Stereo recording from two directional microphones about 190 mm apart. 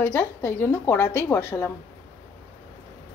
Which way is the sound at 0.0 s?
10° left (ahead or behind).